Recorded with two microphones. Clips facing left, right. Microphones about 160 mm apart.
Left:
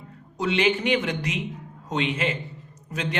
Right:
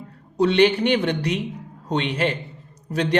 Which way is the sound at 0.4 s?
35° right (ahead or behind).